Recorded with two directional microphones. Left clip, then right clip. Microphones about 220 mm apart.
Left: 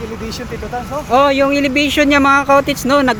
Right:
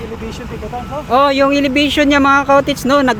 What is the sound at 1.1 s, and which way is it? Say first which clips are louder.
Speech: even; 10° right (ahead or behind).